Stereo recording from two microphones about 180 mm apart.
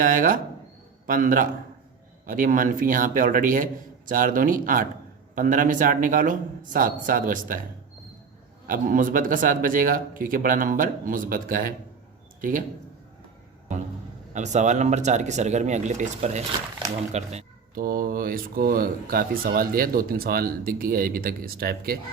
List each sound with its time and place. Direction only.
0.0 s speech: 50° right (ahead or behind)
8.6 s a man's voice: 50° right (ahead or behind)
14.3 s speech: 40° right (ahead or behind)
17.7 s speech: 55° right (ahead or behind)